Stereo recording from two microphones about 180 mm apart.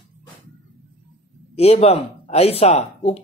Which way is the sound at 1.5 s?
35° left (ahead or behind).